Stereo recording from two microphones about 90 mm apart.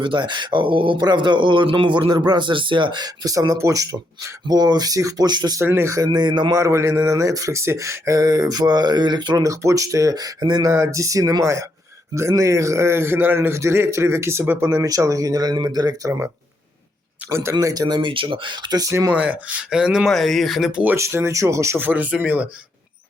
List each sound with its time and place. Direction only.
0.0 s speech: 60° right (ahead or behind)
5.5 s speech: 30° right (ahead or behind)
6.1 s speech: 55° right (ahead or behind)
6.5 s speech: 35° right (ahead or behind)
10.7 s speech: 35° right (ahead or behind)
14.8 s speech: 40° right (ahead or behind)
16.0 s speech: 35° right (ahead or behind); by 18.8 s 60° right (ahead or behind)
18.8 s speech: 35° right (ahead or behind)
19.1 s speech: 15° right (ahead or behind)
20.1 s speech: centre (ahead or behind)
20.9 s speech: 30° right (ahead or behind)
21.8 s speech: 20° right (ahead or behind)